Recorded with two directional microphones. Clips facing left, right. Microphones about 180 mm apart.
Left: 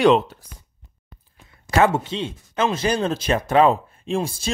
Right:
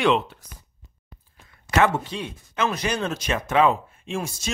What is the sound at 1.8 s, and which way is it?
Speech, 25° left (ahead or behind).